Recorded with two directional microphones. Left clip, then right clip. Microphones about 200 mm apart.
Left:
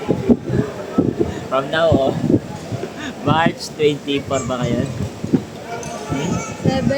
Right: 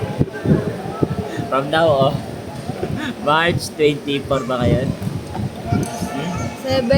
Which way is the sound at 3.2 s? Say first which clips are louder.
Right 1 dB; 5° right (ahead or behind).